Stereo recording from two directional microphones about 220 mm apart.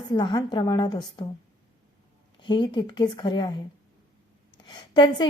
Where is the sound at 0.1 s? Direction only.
20° left (ahead or behind).